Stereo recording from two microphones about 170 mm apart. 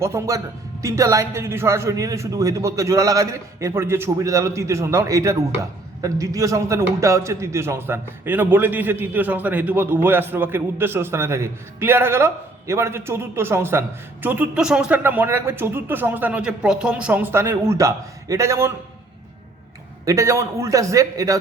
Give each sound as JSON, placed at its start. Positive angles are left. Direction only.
{"t": 0.0, "sound": "a man's voice", "side_deg": -15}
{"t": 20.1, "sound": "a man's voice", "side_deg": -20}